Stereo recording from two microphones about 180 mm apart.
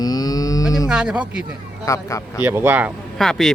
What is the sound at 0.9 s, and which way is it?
Speech, 5° right (ahead or behind).